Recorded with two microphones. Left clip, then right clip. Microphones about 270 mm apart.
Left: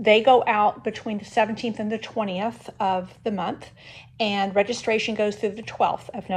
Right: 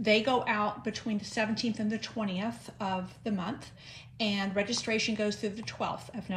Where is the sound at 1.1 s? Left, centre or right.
Centre.